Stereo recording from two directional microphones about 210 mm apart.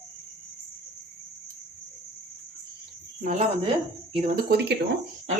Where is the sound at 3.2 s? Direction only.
35° right (ahead or behind).